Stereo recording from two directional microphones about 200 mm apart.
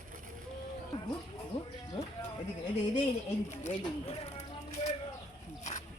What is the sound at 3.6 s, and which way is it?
Speech, 30° left (ahead or behind).